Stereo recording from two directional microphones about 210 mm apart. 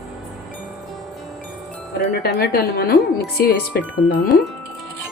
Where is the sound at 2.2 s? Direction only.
50° left (ahead or behind).